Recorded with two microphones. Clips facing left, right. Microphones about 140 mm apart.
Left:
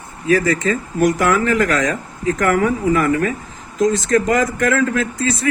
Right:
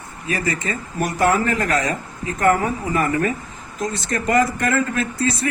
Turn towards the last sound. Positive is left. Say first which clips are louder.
# left 1 dB
turn(degrees=90)